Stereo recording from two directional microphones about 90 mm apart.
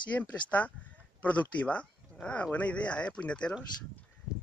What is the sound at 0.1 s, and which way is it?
Speech, 15° left (ahead or behind).